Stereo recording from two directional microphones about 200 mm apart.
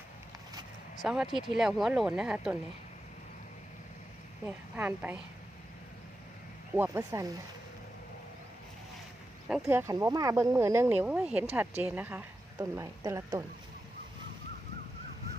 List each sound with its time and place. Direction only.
1.0 s speech: 5° right (ahead or behind)
4.4 s speech: 10° right (ahead or behind)
6.7 s speech: 15° right (ahead or behind)
9.5 s speech: 10° right (ahead or behind)